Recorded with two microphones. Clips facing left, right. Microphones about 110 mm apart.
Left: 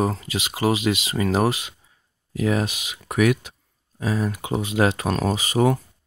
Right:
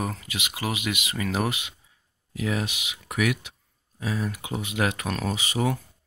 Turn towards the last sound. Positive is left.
turn(degrees=45)  # may be behind; listen again after turning